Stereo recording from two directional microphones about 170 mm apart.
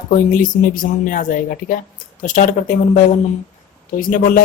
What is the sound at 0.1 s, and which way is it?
Speech, 50° left (ahead or behind).